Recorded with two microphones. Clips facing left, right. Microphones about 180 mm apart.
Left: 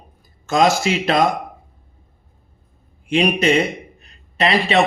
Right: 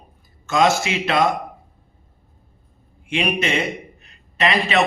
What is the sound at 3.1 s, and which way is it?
Speech, 35° left (ahead or behind).